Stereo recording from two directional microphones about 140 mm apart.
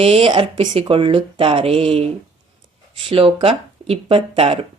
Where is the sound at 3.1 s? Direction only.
40° right (ahead or behind).